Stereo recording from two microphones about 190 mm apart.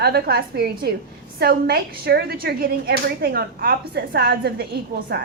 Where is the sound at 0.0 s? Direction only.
55° right (ahead or behind).